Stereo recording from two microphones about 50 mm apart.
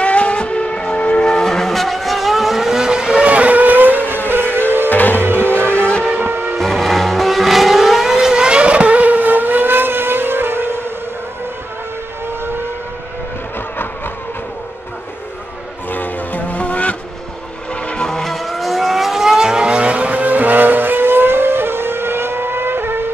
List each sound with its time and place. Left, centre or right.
0.0 s vehicle: left; by 3.3 s centre
3.3 s vehicle: right
4.6 s music: right
4.8 s music: left
5.2 s music: right
6.2 s train: right
6.6 s vehicle: centre; by 10.8 s right
15.9 s vehicle: left
18.0 s vehicle: centre; by 23.0 s right